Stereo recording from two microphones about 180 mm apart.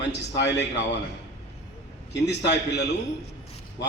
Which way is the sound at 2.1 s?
70° left (ahead or behind).